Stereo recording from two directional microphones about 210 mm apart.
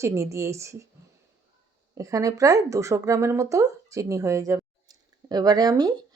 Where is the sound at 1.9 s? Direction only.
15° right (ahead or behind).